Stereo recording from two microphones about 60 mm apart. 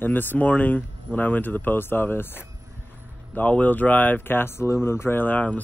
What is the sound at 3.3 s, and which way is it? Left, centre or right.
Speech, left.